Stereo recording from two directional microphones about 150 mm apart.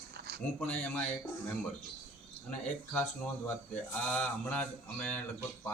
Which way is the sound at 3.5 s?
10° left (ahead or behind).